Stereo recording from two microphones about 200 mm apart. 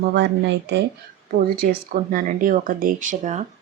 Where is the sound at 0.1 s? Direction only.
60° right (ahead or behind).